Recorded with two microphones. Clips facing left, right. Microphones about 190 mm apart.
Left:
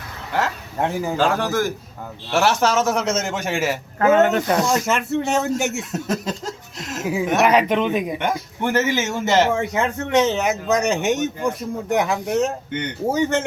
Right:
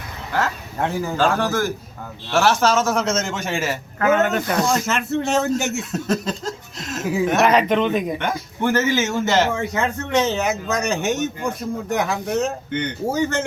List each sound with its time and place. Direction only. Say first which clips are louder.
0.3 s speech: even; 15° left (ahead or behind)
4.0 s a man's voice: left 3 dB; 25° left (ahead or behind)